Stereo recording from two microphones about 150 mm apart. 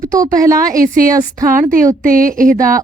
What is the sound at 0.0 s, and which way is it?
Speech, 25° right (ahead or behind).